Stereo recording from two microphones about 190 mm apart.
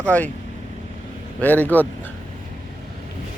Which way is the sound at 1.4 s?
10° left (ahead or behind).